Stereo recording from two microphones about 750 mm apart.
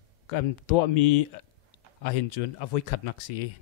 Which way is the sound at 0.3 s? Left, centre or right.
Left.